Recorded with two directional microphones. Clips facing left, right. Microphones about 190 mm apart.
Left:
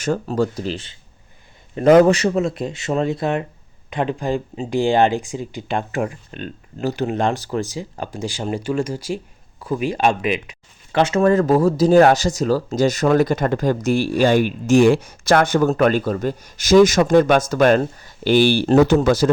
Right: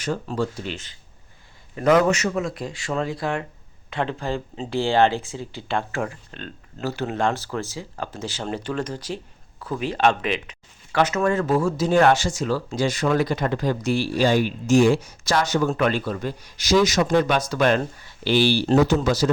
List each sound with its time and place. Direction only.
0.0 s speech: 45° left (ahead or behind); by 10.6 s 10° left (ahead or behind)
10.9 s speech: 30° left (ahead or behind); by 19.3 s 50° left (ahead or behind)